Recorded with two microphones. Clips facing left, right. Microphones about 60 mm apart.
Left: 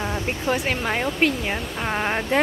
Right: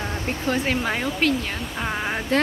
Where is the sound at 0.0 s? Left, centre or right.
Centre.